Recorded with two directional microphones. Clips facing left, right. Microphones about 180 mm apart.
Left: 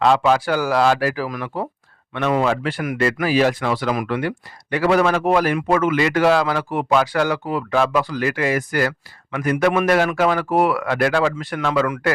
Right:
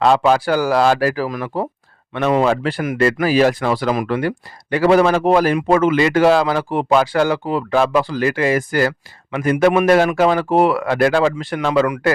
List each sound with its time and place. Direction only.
0.0 s speech: 35° right (ahead or behind)
1.3 s speech: 25° right (ahead or behind)